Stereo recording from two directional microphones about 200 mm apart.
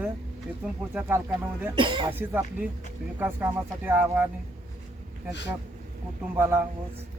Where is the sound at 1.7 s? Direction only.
25° right (ahead or behind).